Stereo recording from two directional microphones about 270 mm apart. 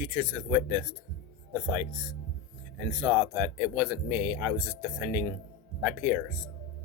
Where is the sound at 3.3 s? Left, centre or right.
Centre.